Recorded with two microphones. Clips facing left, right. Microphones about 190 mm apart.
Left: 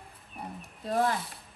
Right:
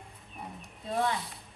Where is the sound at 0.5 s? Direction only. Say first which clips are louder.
Left 3 dB; centre (ahead or behind).